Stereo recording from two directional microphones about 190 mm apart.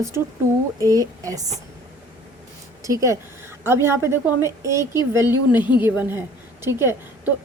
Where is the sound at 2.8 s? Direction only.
15° right (ahead or behind).